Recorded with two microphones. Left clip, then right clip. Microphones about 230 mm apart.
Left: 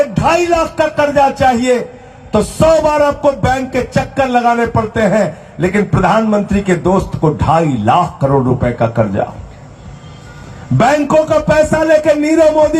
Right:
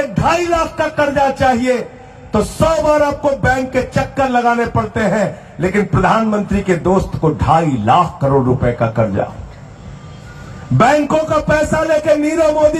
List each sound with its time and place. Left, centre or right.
0.1 s a man's voice: left
10.8 s a man's voice: left